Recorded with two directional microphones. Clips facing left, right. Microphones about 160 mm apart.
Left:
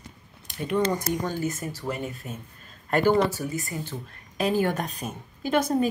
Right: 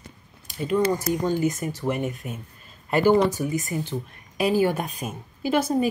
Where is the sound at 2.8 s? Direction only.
10° right (ahead or behind).